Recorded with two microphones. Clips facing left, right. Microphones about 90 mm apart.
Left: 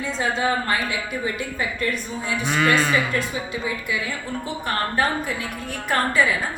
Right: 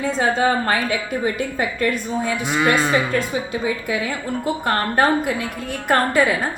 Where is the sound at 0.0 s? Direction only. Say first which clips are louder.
Right 5 dB; 55° right (ahead or behind).